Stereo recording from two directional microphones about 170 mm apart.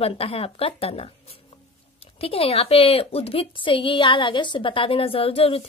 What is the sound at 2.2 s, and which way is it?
A woman's voice, 35° left (ahead or behind).